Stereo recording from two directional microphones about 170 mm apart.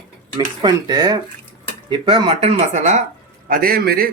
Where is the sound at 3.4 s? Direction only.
60° right (ahead or behind).